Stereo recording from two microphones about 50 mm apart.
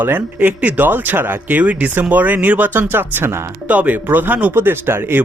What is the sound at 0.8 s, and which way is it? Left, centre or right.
Speech, right.